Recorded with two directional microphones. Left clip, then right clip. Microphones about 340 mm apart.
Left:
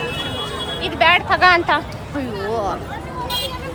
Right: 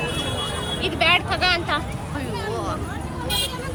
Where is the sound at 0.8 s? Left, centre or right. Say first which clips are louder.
Left 5 dB; left.